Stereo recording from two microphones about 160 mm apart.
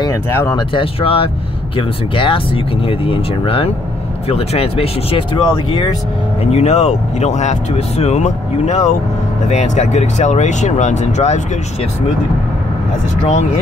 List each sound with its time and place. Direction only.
0.0 s speech: 20° left (ahead or behind)
0.7 s speech: 35° left (ahead or behind)
5.4 s speech: 25° left (ahead or behind)
6.5 s speech: 45° left (ahead or behind)